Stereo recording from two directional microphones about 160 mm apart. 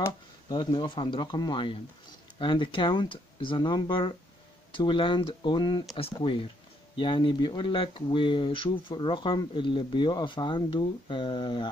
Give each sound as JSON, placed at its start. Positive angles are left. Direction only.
{"t": 0.0, "sound": "speech", "side_deg": 25}